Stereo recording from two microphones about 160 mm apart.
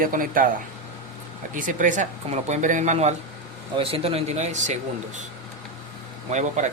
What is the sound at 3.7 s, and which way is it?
Speech, 35° right (ahead or behind).